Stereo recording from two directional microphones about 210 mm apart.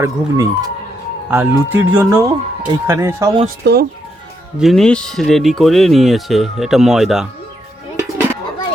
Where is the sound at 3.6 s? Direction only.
55° right (ahead or behind).